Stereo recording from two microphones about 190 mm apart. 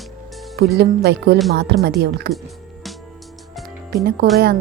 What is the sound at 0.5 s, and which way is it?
Speech, 60° right (ahead or behind).